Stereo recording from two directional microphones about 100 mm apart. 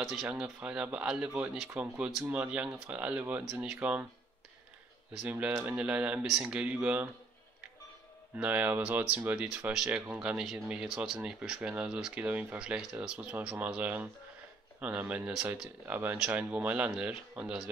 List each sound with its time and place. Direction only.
0.0 s speech: 5° right (ahead or behind)
5.2 s speech: 15° right (ahead or behind)
8.4 s speech: 15° right (ahead or behind)